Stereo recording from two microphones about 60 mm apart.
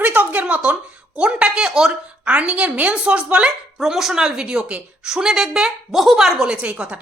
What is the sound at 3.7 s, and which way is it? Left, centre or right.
A woman's voice, centre.